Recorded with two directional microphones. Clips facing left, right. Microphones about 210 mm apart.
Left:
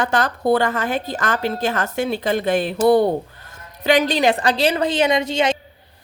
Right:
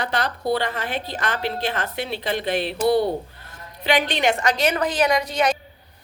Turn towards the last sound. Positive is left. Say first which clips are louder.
# left 2 dB
turn(degrees=25)  # may be behind; listen again after turning